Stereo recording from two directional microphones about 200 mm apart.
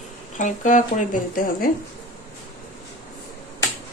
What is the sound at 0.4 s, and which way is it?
Speech, 40° left (ahead or behind).